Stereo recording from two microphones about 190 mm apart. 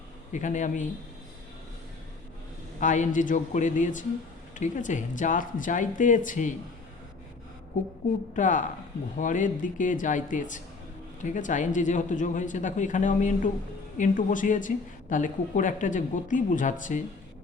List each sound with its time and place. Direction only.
0.3 s speech: 40° left (ahead or behind)
2.8 s speech: 40° left (ahead or behind)
8.4 s speech: 40° left (ahead or behind)